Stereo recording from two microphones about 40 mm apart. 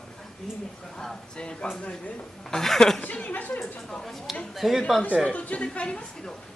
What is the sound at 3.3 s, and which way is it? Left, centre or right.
Speech, left.